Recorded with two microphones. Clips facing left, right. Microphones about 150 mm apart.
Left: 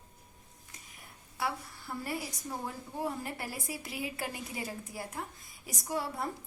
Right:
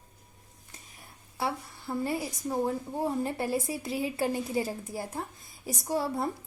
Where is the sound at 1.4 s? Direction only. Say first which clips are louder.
Right 3 dB; 25° right (ahead or behind).